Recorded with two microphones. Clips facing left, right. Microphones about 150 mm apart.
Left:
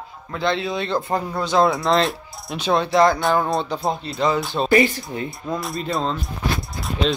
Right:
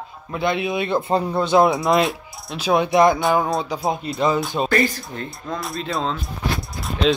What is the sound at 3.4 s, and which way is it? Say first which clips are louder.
Speech: even; centre (ahead or behind).